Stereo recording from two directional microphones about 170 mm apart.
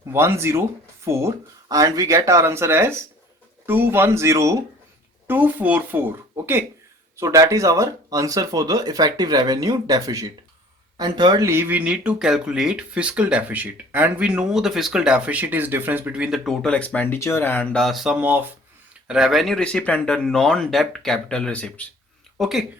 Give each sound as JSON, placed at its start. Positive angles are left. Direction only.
{"t": 0.1, "sound": "speech", "side_deg": -15}